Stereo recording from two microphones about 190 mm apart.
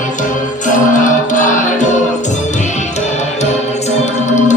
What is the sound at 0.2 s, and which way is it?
Music, 40° left (ahead or behind).